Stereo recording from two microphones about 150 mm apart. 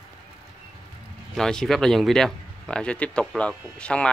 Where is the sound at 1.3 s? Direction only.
5° left (ahead or behind).